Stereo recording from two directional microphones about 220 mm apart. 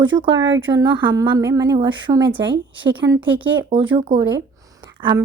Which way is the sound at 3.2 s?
5° right (ahead or behind).